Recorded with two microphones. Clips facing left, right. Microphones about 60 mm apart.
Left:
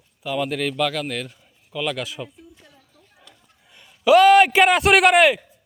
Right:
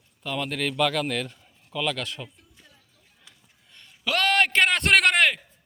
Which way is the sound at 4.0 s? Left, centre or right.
Centre.